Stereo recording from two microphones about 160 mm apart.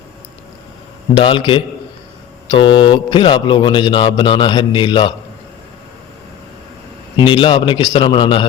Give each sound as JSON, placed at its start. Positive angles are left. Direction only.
{"t": 1.2, "sound": "a man's voice", "side_deg": 35}
{"t": 7.3, "sound": "a man's voice", "side_deg": 30}